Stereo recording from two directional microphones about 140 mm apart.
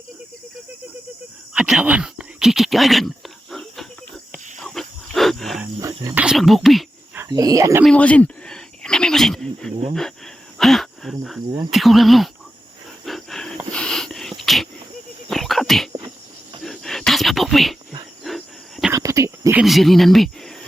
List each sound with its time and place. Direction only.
1.5 s a sound: 5° right (ahead or behind)
4.6 s wild animals: centre (ahead or behind)
5.8 s cricket: 25° right (ahead or behind)
6.1 s speech: 5° right (ahead or behind)
7.3 s speech: 25° right (ahead or behind)
7.9 s speech: 10° left (ahead or behind)
13.1 s dog: centre (ahead or behind)
15.3 s cricket: centre (ahead or behind)
16.6 s a sound: 5° left (ahead or behind)
18.9 s cricket: 20° right (ahead or behind)
19.5 s speech: centre (ahead or behind)